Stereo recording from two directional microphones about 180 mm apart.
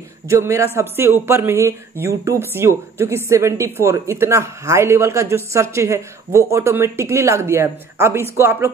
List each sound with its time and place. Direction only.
0.3 s speech: 15° right (ahead or behind)